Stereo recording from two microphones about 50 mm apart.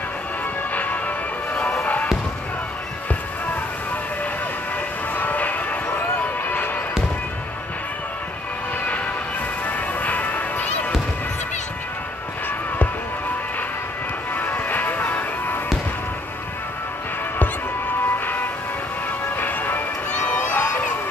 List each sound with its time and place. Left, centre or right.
0.7 s music: left
5.1 s music: left
9.7 s music: left
14.3 s music: left
19.3 s music: left
20.1 s crowd: left